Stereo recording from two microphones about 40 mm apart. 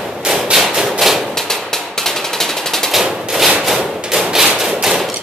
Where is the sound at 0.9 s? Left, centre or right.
Centre.